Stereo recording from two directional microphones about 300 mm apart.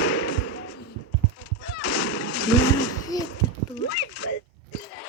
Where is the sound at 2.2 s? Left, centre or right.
Left.